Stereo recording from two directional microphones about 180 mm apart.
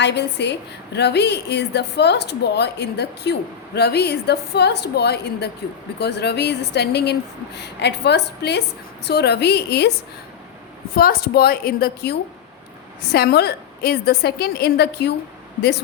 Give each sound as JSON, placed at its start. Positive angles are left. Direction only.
{"t": 0.0, "sound": "a woman's voice", "side_deg": 70}
{"t": 10.9, "sound": "a woman's voice", "side_deg": 55}